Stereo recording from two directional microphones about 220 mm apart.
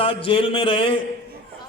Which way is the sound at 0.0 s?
25° left (ahead or behind).